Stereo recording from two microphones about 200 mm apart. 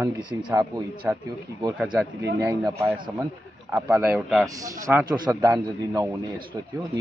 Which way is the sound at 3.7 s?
5° right (ahead or behind).